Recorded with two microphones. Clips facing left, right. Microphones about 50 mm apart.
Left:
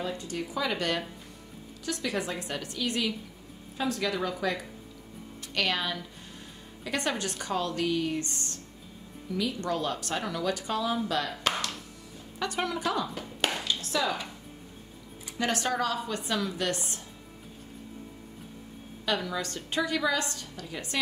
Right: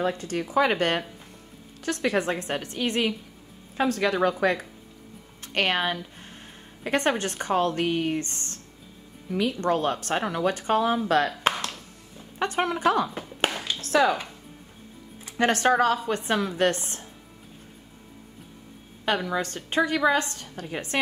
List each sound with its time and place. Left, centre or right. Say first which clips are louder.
0.0 s a woman's voice: right 6 dB; right
3.7 s a woman's voice: right 6 dB; right
12.4 s a woman's voice: right 5 dB; right
13.7 s a sound: right 12 dB; right
15.2 s a woman's voice: right 8 dB; right
19.0 s a woman's voice: right 5 dB; right